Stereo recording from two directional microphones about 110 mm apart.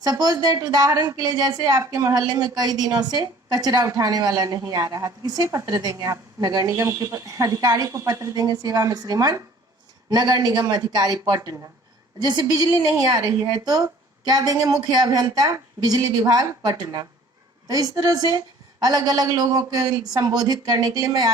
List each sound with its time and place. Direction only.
0.0 s a woman's voice: 35° right (ahead or behind)